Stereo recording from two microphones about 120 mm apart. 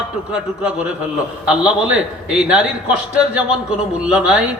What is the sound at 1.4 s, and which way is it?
A man's voice, 10° right (ahead or behind).